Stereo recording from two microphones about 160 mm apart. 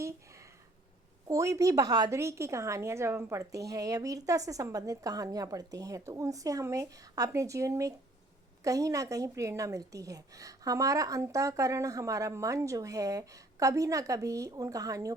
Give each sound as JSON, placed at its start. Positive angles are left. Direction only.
{"t": 1.3, "sound": "a woman's voice", "side_deg": -20}